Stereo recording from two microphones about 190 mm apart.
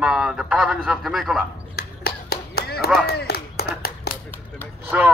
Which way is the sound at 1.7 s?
55° left (ahead or behind).